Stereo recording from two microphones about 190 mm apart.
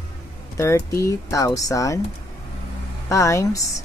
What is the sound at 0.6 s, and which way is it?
Speech, 15° left (ahead or behind).